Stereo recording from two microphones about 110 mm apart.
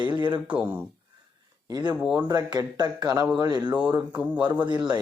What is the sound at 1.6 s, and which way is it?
Speech, 40° right (ahead or behind).